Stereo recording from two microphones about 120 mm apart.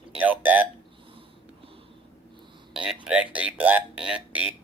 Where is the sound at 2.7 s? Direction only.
5° right (ahead or behind).